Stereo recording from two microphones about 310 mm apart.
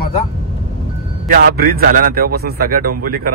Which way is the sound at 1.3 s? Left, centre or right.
Right.